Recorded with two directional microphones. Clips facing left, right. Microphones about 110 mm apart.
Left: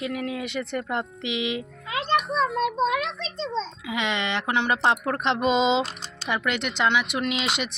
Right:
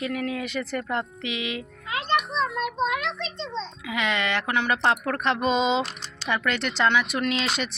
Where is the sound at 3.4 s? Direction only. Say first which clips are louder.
Left 5 dB; 35° left (ahead or behind).